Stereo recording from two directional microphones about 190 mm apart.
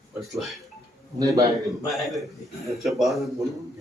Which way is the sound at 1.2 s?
15° right (ahead or behind).